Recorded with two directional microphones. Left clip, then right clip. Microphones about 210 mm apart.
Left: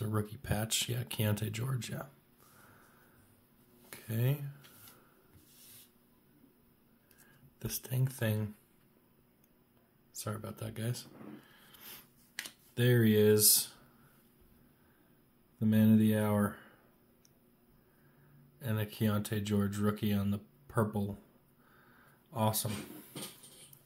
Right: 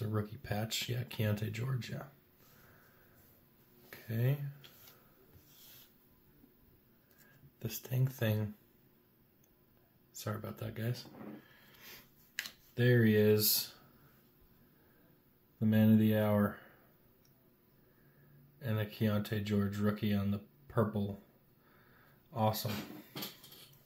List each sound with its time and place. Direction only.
0.0 s speech: 30° left (ahead or behind)
3.9 s speech: 25° left (ahead or behind)
7.5 s speech: 15° left (ahead or behind)
10.1 s speech: 15° left (ahead or behind)
15.6 s speech: 15° left (ahead or behind)
18.6 s speech: 25° left (ahead or behind)
22.3 s speech: 30° left (ahead or behind)